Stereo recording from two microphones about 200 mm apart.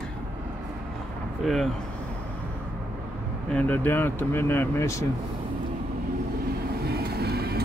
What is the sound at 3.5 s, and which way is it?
Speech, 10° left (ahead or behind).